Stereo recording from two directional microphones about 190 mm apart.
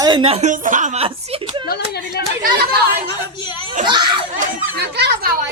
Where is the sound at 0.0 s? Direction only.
25° right (ahead or behind).